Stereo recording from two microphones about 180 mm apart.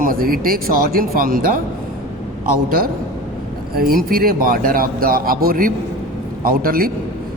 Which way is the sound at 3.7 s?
55° right (ahead or behind).